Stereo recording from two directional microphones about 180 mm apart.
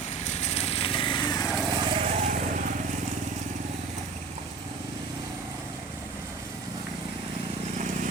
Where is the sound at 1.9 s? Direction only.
35° right (ahead or behind).